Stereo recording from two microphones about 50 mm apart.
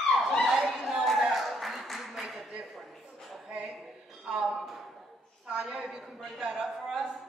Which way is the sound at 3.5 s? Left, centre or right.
Right.